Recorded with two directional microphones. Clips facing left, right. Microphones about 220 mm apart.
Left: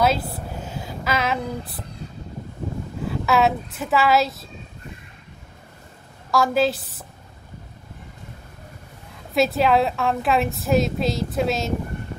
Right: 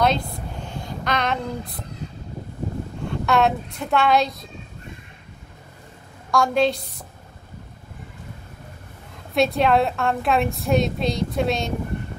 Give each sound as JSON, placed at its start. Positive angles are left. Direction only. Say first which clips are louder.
{"t": 0.0, "sound": "a sound", "louder": "even", "side_deg": 5}
{"t": 3.0, "sound": "speech", "louder": "even", "side_deg": 5}
{"t": 6.3, "sound": "a woman's voice", "louder": "even", "side_deg": 5}
{"t": 9.3, "sound": "a woman's voice", "louder": "even", "side_deg": 0}